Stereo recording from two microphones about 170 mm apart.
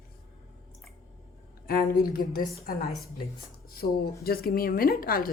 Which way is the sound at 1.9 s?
60° left (ahead or behind).